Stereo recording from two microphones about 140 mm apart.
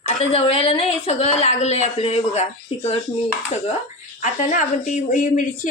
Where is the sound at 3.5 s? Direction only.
55° left (ahead or behind).